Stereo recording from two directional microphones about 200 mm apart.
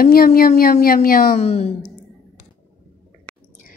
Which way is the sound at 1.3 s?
30° left (ahead or behind).